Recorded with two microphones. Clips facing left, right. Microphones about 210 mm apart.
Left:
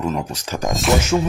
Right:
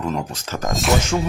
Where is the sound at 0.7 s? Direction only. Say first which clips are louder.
Left 2 dB; centre (ahead or behind).